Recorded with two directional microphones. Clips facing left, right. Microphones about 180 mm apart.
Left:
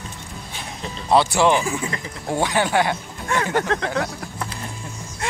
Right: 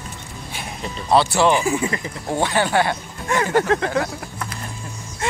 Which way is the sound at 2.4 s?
15° left (ahead or behind).